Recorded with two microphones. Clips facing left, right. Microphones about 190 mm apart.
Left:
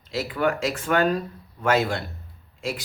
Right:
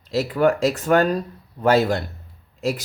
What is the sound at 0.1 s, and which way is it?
Speech, 40° right (ahead or behind).